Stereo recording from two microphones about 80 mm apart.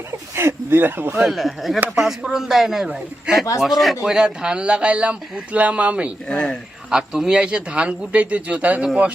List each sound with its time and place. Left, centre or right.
0.3 s speech: right
1.2 s a man's voice: centre
6.2 s speech: centre
6.9 s speech: centre